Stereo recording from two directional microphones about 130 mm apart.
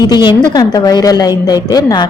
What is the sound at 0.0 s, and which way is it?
A woman's voice, 35° left (ahead or behind).